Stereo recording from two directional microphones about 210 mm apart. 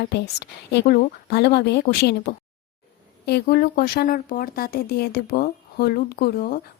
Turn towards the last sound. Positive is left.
turn(degrees=45)  # may be behind; listen again after turning